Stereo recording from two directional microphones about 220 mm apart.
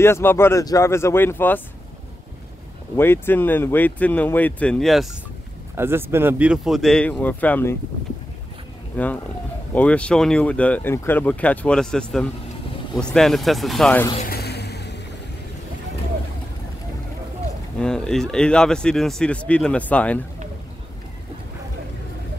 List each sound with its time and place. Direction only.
0.0 s speech: 10° left (ahead or behind)
3.0 s speech: 10° left (ahead or behind)
5.8 s speech: 10° right (ahead or behind); by 7.7 s 10° left (ahead or behind)
8.9 s speech: 5° left (ahead or behind)
14.1 s a sound: 40° left (ahead or behind)
17.7 s speech: 5° left (ahead or behind)